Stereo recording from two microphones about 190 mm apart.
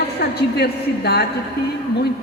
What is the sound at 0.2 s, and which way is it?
A woman's voice, 55° left (ahead or behind).